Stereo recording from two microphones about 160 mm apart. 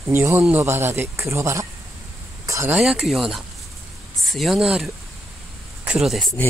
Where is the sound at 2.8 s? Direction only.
5° right (ahead or behind).